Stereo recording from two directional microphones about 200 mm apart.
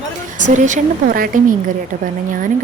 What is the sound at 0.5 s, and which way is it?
A woman's voice, 40° right (ahead or behind).